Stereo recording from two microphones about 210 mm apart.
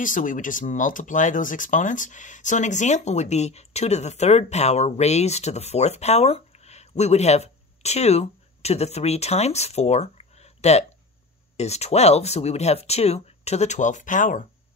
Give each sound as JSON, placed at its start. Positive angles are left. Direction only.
{"t": 0.0, "sound": "speech", "side_deg": 40}